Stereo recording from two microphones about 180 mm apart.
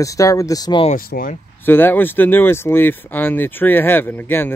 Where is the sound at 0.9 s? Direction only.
50° left (ahead or behind).